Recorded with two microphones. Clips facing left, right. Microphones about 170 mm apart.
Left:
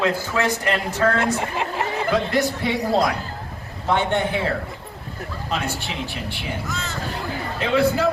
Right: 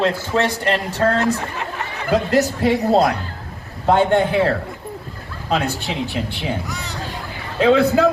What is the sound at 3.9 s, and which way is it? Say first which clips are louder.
Speech: right 6 dB; 55° right (ahead or behind).